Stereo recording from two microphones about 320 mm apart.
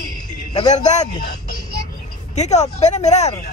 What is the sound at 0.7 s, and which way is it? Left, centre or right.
Speech, left.